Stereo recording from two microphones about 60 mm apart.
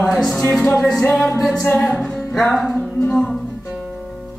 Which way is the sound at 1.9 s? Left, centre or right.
Centre.